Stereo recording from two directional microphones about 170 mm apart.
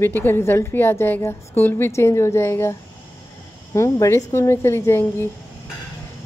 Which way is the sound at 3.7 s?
15° left (ahead or behind).